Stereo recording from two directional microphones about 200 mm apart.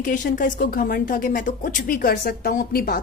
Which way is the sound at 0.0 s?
40° left (ahead or behind).